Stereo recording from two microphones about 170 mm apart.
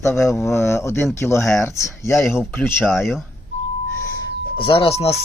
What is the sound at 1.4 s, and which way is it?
Speech, centre (ahead or behind).